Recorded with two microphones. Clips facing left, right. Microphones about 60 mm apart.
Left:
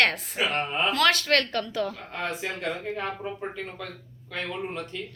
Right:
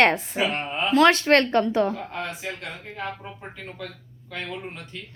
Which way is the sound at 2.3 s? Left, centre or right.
Centre.